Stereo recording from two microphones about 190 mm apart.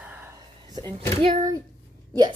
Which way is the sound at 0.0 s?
10° right (ahead or behind).